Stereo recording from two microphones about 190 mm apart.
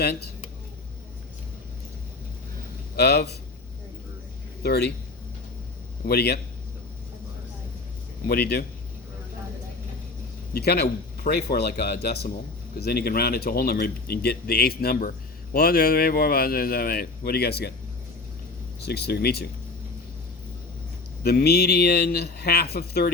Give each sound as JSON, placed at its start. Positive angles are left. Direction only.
{"t": 0.0, "sound": "a sound", "side_deg": 55}
{"t": 2.9, "sound": "a man's voice", "side_deg": 55}
{"t": 4.6, "sound": "a man's voice", "side_deg": 55}
{"t": 6.1, "sound": "a man's voice", "side_deg": 55}
{"t": 8.3, "sound": "a man's voice", "side_deg": 55}
{"t": 10.5, "sound": "a man's voice", "side_deg": 55}
{"t": 18.8, "sound": "a man's voice", "side_deg": 60}
{"t": 21.2, "sound": "a man's voice", "side_deg": 55}